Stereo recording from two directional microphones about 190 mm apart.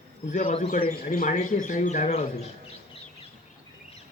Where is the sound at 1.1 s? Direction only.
45° left (ahead or behind).